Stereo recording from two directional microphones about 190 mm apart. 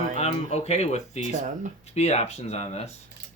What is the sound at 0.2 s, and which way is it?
Speech, 35° left (ahead or behind).